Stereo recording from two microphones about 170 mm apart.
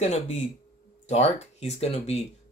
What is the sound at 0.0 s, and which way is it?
Speech, 45° left (ahead or behind).